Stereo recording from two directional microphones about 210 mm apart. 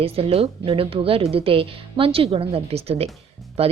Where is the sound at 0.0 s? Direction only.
30° right (ahead or behind).